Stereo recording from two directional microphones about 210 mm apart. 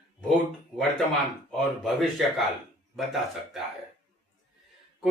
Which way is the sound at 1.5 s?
Centre (ahead or behind).